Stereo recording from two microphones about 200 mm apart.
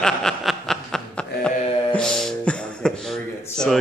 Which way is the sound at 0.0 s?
5° left (ahead or behind).